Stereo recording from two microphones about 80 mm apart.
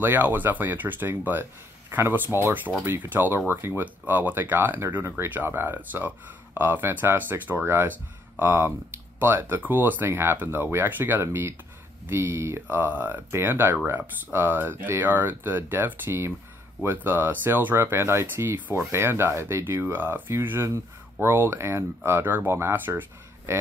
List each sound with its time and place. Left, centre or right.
0.0 s speech: right